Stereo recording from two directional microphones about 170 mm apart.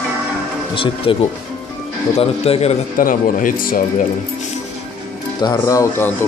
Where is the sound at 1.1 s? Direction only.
30° left (ahead or behind).